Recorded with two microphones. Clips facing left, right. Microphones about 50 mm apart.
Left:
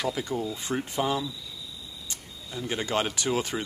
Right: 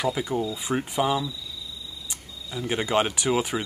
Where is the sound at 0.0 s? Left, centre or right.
Centre.